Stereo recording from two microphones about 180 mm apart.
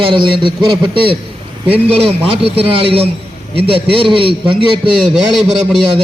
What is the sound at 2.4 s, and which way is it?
A man's voice, 30° right (ahead or behind).